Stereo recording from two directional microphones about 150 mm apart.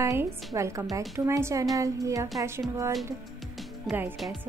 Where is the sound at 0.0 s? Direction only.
20° right (ahead or behind).